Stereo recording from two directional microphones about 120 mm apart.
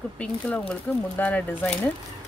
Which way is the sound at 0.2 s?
10° left (ahead or behind).